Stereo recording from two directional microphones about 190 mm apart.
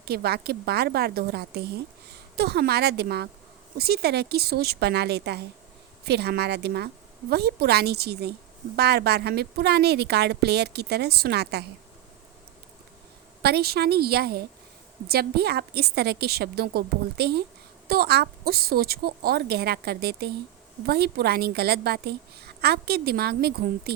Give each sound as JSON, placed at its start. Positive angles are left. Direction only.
{"t": 0.0, "sound": "a woman's voice", "side_deg": -55}
{"t": 13.4, "sound": "a woman's voice", "side_deg": -55}